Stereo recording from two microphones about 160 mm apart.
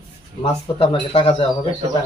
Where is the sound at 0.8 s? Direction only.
35° left (ahead or behind).